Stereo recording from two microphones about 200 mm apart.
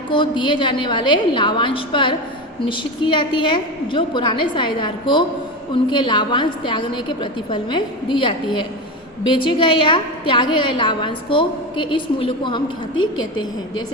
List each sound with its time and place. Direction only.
0.1 s a woman's voice: 25° left (ahead or behind)